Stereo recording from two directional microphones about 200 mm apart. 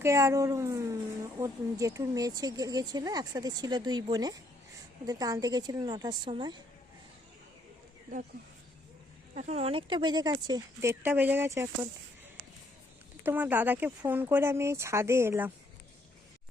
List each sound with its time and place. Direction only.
0.0 s speech: 15° right (ahead or behind)
9.3 s speech: 35° right (ahead or behind); by 11.9 s 15° right (ahead or behind)
13.2 s speech: 10° right (ahead or behind)